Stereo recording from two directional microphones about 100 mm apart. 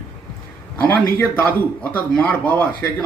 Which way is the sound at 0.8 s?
20° left (ahead or behind).